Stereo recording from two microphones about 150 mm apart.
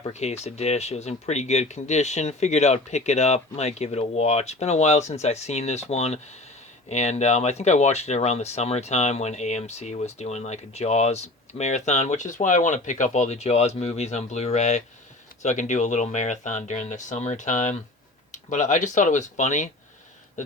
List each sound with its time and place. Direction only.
0.1 s speech: 45° left (ahead or behind)